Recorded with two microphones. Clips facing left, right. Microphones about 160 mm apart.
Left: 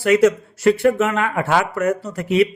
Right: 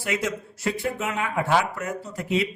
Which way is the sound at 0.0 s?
75° left (ahead or behind).